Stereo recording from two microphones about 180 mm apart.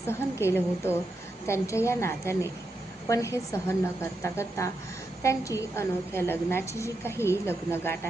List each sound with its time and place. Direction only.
0.1 s a woman's voice: 15° left (ahead or behind)